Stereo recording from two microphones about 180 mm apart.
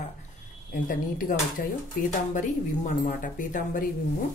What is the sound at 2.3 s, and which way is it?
Speech, 45° left (ahead or behind).